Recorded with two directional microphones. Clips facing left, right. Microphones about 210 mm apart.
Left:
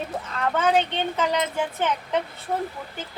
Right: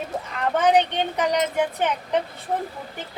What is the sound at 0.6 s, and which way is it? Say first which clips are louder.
A woman's voice: right 4 dB; 15° right (ahead or behind).